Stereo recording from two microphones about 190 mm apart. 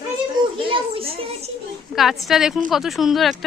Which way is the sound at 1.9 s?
Centre (ahead or behind).